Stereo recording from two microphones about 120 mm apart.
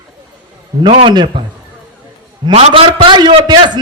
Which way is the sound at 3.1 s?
40° right (ahead or behind).